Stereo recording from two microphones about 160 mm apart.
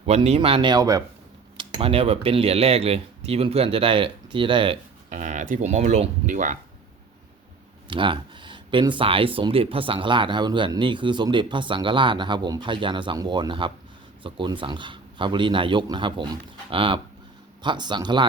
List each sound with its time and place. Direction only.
0.0 s speech: 40° right (ahead or behind); by 1.0 s 20° right (ahead or behind)
1.5 s speech: 35° right (ahead or behind)
5.0 s speech: 50° right (ahead or behind)
7.9 s speech: 30° right (ahead or behind)